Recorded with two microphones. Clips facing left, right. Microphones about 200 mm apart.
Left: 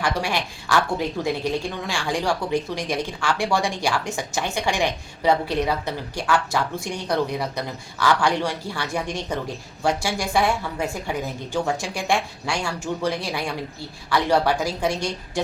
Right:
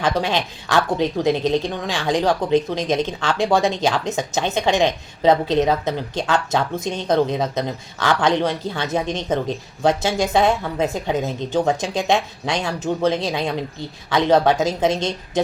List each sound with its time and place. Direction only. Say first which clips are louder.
0.0 s speech: right 4 dB; 20° right (ahead or behind)